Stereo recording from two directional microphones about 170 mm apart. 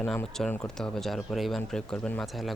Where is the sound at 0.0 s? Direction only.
5° left (ahead or behind).